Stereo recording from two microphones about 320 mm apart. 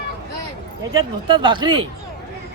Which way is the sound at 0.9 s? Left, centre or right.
Centre.